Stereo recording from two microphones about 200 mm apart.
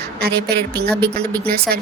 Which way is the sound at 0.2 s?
55° right (ahead or behind).